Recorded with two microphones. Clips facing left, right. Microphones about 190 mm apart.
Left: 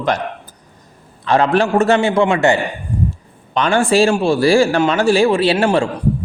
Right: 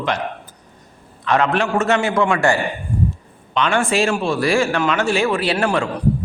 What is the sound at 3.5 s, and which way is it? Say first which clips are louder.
A man's voice: left 4 dB; 35° left (ahead or behind).